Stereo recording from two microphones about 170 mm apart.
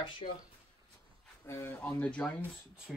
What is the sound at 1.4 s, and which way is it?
Speech, 15° left (ahead or behind).